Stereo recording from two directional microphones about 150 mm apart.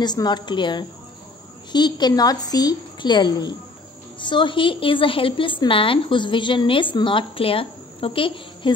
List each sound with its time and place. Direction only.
0.0 s a woman's voice: 30° left (ahead or behind)